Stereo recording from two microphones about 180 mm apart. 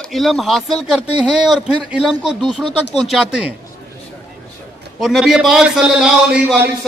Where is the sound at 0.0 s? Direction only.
Centre (ahead or behind).